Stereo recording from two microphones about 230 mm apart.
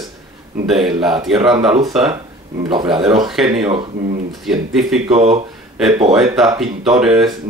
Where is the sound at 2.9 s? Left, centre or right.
Centre.